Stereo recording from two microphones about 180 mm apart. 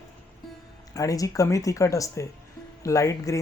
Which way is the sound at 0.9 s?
20° left (ahead or behind).